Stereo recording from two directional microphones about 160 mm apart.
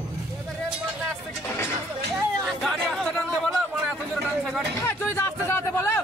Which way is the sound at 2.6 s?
5° left (ahead or behind).